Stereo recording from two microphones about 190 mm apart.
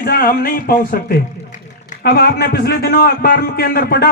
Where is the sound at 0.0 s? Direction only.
50° left (ahead or behind).